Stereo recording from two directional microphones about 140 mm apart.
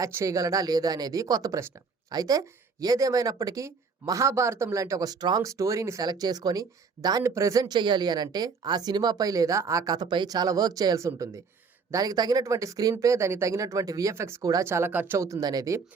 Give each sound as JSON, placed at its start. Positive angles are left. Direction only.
{"t": 0.0, "sound": "speech", "side_deg": -25}